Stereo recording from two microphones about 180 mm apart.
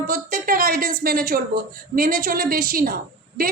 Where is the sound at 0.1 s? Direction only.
50° right (ahead or behind).